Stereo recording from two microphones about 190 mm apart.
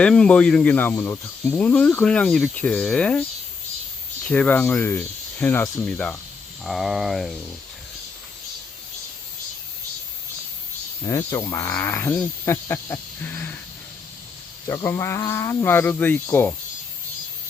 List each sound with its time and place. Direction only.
0.0 s speech: 5° left (ahead or behind)
4.3 s speech: 5° left (ahead or behind)
11.0 s speech: 15° left (ahead or behind)
14.7 s speech: 15° left (ahead or behind)